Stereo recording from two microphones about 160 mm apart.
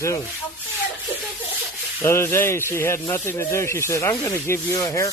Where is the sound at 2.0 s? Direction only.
15° left (ahead or behind).